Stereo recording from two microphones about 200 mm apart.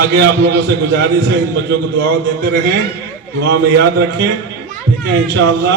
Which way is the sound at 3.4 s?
60° right (ahead or behind).